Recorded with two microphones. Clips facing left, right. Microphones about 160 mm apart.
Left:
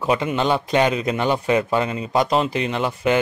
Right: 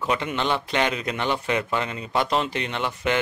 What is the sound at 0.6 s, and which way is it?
Speech, 25° left (ahead or behind).